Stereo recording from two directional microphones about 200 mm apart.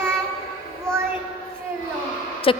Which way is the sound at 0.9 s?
5° left (ahead or behind).